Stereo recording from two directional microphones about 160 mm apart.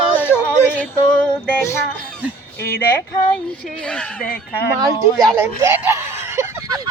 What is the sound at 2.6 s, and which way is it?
Speech, 70° left (ahead or behind).